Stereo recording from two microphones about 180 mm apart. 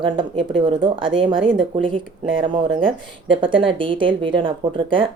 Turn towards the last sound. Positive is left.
turn(degrees=-30)  # may be behind; listen again after turning